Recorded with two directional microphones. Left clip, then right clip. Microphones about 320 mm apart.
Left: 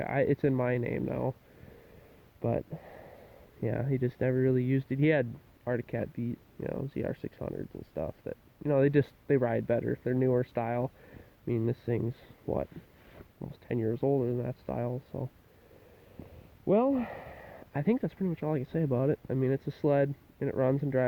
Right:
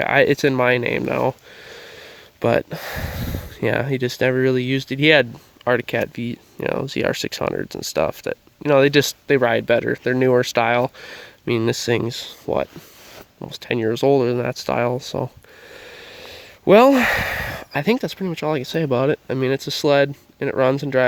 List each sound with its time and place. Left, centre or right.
0.0 s speech: centre
2.4 s speech: centre
15.1 s speech: right
16.6 s speech: right